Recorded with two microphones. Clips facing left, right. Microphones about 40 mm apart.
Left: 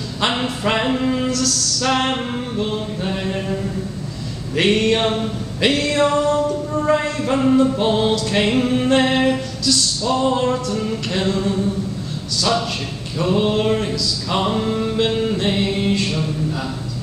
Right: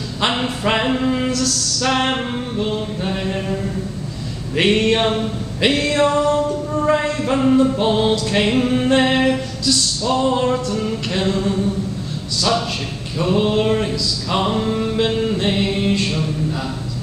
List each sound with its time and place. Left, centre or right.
0.2 s music: centre
2.5 s a sound: centre
4.6 s music: centre